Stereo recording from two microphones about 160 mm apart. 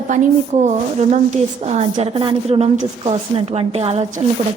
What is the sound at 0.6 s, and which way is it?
A woman's voice, 50° right (ahead or behind).